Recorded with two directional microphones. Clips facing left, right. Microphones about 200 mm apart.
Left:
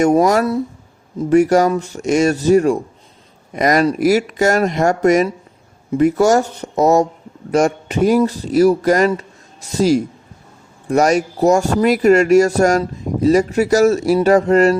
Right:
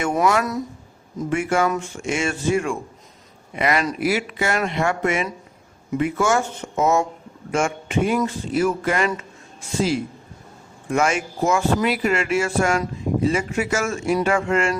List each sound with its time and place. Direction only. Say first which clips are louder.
0.0 s a man's voice: left 7 dB; 40° left (ahead or behind)